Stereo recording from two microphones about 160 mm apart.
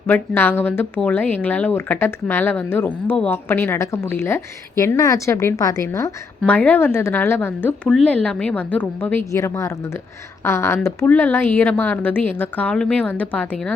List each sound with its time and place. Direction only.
0.1 s a woman's voice: 15° left (ahead or behind)